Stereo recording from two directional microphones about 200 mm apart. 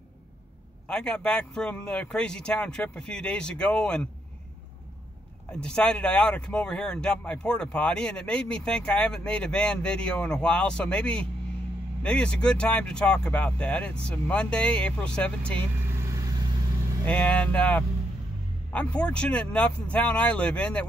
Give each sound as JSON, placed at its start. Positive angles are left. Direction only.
{"t": 0.8, "sound": "speech", "side_deg": 5}
{"t": 5.5, "sound": "speech", "side_deg": 5}
{"t": 15.9, "sound": "vehicle", "side_deg": -15}
{"t": 17.0, "sound": "speech", "side_deg": 5}